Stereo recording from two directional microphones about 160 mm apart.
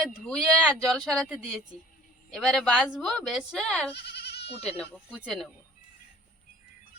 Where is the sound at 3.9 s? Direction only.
90° left.